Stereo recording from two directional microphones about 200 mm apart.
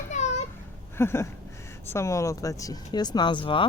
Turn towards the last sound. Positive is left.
turn(degrees=25)  # may be behind; listen again after turning